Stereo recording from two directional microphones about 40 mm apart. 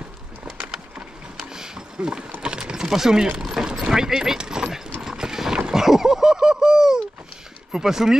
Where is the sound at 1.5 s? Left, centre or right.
Centre.